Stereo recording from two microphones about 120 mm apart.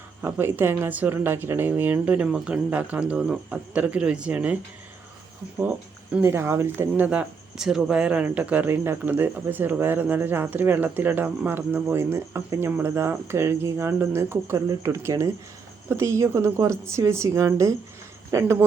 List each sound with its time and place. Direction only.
0.2 s speech: 20° right (ahead or behind)
5.5 s a woman's voice: 15° right (ahead or behind)